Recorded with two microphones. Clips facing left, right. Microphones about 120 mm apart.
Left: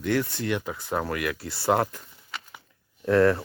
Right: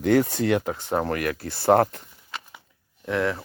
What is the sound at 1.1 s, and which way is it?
Speech, 45° right (ahead or behind).